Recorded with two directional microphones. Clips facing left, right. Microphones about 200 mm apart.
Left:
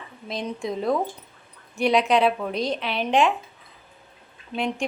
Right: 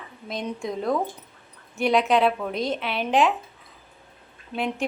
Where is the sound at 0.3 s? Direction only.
Centre (ahead or behind).